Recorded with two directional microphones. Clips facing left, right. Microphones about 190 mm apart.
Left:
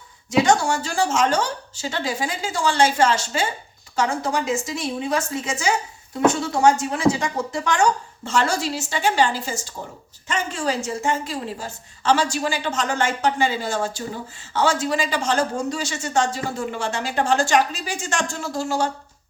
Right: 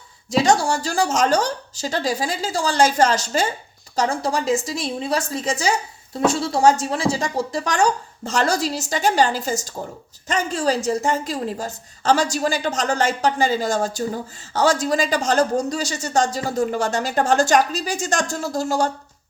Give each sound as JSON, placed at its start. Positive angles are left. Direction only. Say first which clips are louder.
{"t": 0.4, "sound": "speech", "louder": "right 1 dB", "side_deg": -35}